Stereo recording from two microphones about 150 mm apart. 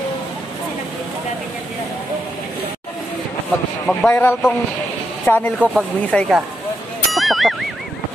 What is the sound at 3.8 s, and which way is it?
Speech, 15° left (ahead or behind).